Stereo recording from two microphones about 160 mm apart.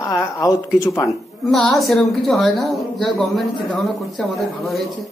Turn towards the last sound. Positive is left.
turn(degrees=0)  # may be behind; listen again after turning